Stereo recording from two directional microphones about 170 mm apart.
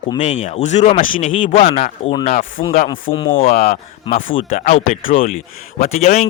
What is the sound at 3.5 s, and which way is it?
Speech, 60° left (ahead or behind).